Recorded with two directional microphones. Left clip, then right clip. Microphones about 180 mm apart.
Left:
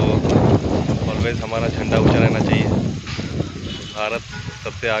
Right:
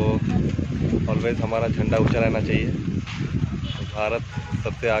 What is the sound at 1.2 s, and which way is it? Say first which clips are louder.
Speech: left 1 dB; centre (ahead or behind).